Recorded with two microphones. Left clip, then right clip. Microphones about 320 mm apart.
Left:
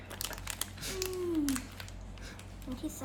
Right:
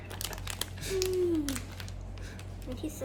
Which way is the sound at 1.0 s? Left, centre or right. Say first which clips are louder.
Right 5 dB; centre.